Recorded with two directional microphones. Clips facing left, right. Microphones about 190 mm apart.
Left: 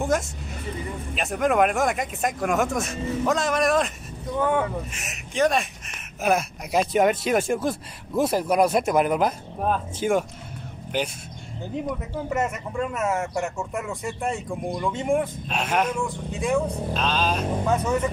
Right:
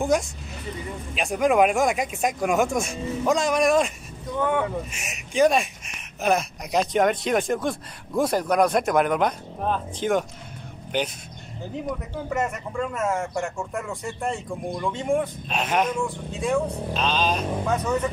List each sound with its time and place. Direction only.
0.0 s speech: centre (ahead or behind)
4.9 s speech: centre (ahead or behind)